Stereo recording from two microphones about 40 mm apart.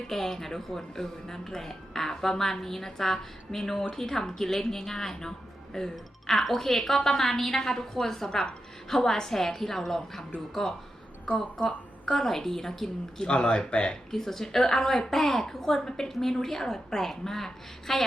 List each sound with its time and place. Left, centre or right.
0.1 s speech: centre
11.6 s a woman's voice: left
12.2 s speech: centre
13.2 s speech: left
14.1 s speech: centre